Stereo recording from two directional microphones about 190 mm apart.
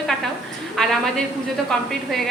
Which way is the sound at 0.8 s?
5° left (ahead or behind).